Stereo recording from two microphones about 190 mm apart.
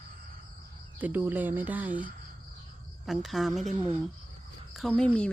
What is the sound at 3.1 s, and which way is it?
Speech, centre (ahead or behind).